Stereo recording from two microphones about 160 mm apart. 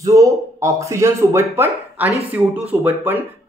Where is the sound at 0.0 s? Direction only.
20° right (ahead or behind).